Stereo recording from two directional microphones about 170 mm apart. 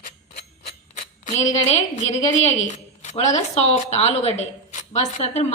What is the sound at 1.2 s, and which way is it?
A woman's voice, 40° left (ahead or behind).